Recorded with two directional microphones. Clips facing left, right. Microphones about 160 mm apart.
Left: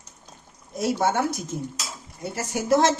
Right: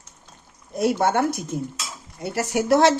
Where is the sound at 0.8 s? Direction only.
60° right (ahead or behind).